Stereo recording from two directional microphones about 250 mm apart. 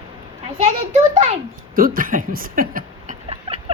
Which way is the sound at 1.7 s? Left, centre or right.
Right.